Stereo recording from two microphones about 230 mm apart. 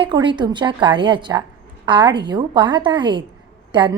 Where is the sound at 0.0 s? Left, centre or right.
Right.